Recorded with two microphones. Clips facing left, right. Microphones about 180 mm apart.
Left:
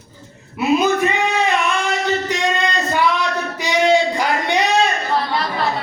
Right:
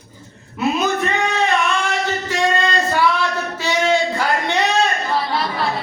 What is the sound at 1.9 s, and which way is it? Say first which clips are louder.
Singing: left 2 dB; 20° left (ahead or behind).